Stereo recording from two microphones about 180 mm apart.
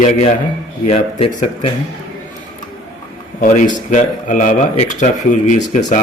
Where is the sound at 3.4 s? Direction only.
45° left (ahead or behind).